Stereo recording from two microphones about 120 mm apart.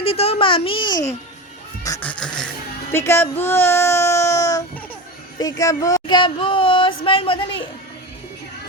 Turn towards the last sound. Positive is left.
turn(degrees=45)  # may be behind; listen again after turning